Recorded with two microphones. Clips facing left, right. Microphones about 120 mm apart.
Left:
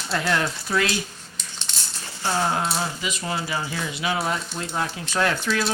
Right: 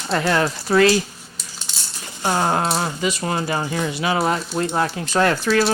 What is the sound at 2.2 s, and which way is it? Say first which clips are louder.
Speech: right 4 dB; 50° right (ahead or behind).